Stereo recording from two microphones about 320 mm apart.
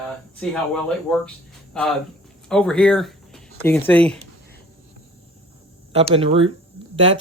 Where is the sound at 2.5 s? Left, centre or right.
Centre.